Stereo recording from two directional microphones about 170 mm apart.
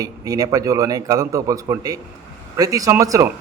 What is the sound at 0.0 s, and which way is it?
A man's voice, 20° right (ahead or behind).